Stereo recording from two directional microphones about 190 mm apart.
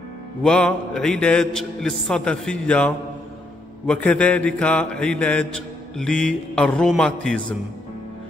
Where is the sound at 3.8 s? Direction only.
5° left (ahead or behind).